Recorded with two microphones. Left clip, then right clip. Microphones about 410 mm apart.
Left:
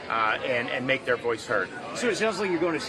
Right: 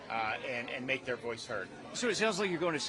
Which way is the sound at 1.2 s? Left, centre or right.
Right.